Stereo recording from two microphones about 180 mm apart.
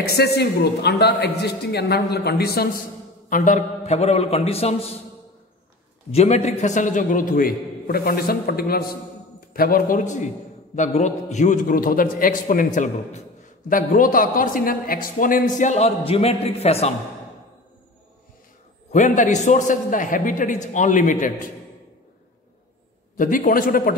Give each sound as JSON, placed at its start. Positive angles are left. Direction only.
{"t": 0.0, "sound": "a man's voice", "side_deg": 60}
{"t": 3.3, "sound": "a man's voice", "side_deg": 45}
{"t": 6.1, "sound": "a man's voice", "side_deg": 40}
{"t": 18.9, "sound": "a man's voice", "side_deg": 45}
{"t": 23.1, "sound": "a man's voice", "side_deg": 45}